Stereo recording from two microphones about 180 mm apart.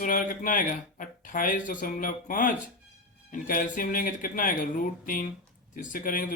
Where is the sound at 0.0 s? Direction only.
50° left (ahead or behind).